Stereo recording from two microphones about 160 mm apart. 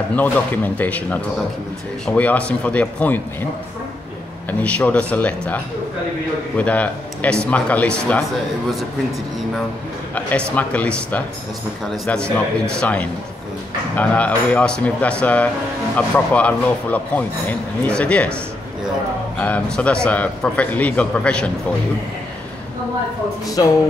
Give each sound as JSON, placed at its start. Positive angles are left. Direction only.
{"t": 0.1, "sound": "a man's voice", "side_deg": 10}
{"t": 4.5, "sound": "a man's voice", "side_deg": 10}
{"t": 10.5, "sound": "a man's voice", "side_deg": 10}
{"t": 23.6, "sound": "music", "side_deg": 25}